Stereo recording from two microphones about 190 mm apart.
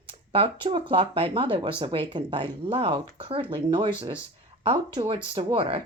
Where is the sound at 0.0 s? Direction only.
30° right (ahead or behind).